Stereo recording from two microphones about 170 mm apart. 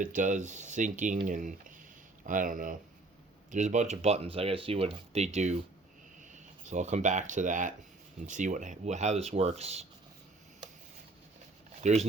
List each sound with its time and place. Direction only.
0.0 s speech: 50° right (ahead or behind)
11.8 s speech: 40° right (ahead or behind)